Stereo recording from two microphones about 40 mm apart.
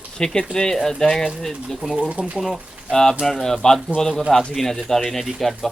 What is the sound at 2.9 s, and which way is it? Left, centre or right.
Speech, centre.